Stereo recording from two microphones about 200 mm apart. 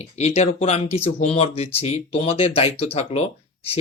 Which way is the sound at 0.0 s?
35° left (ahead or behind).